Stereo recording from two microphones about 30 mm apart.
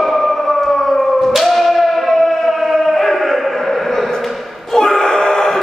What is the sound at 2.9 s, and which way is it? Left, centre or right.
Chant, centre.